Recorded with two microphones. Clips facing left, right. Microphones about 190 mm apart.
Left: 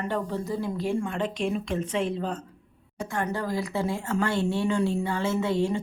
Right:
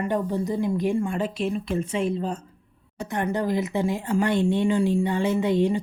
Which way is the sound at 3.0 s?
20° right (ahead or behind).